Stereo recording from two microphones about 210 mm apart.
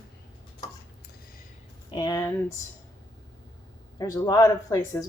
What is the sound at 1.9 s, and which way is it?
Speech, 20° left (ahead or behind).